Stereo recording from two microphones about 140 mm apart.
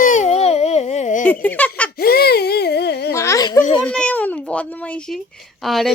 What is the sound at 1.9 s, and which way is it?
Speech, 90° left.